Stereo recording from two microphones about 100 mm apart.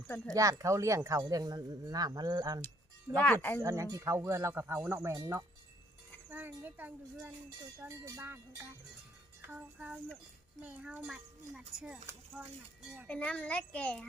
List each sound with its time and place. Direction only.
0.3 s speech: 35° right (ahead or behind)
3.2 s speech: 20° left (ahead or behind)
3.6 s speech: 35° right (ahead or behind)
5.1 s speech: 40° right (ahead or behind)
6.3 s a child's voice: 20° right (ahead or behind)
13.1 s a child's voice: 10° left (ahead or behind)